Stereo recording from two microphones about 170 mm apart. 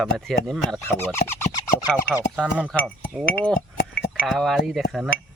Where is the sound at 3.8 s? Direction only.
70° left (ahead or behind).